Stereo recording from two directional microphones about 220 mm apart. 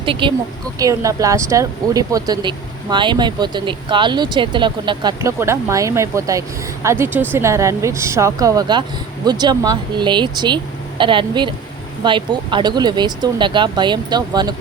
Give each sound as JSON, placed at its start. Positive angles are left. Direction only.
{"t": 0.0, "sound": "speech", "side_deg": -25}